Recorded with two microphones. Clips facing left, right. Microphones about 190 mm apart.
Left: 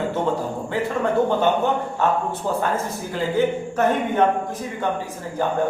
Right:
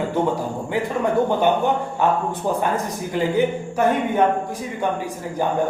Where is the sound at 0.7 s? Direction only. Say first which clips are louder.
Even; 15° right (ahead or behind).